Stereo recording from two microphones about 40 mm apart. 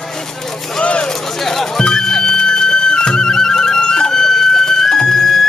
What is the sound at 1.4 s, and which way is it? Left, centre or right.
Music, centre.